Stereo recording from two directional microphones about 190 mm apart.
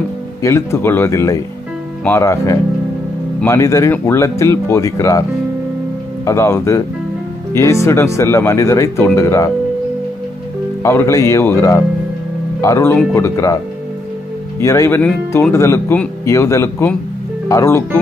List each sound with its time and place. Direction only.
0.4 s speech: 15° left (ahead or behind)
6.2 s speech: 15° left (ahead or behind)
10.8 s speech: 15° left (ahead or behind)
14.6 s speech: 15° left (ahead or behind)